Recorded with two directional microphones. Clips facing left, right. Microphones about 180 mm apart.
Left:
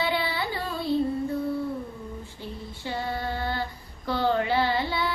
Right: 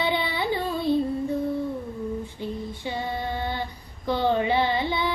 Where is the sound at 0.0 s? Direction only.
20° right (ahead or behind).